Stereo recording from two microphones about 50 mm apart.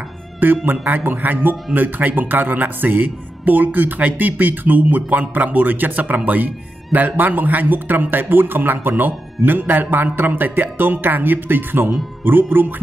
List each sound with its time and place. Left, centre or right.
0.7 s a man's voice: right